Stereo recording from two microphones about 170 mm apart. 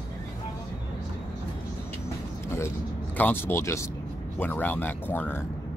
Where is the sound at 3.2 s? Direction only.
10° left (ahead or behind).